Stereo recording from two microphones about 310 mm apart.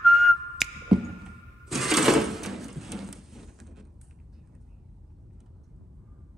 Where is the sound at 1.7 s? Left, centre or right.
Centre.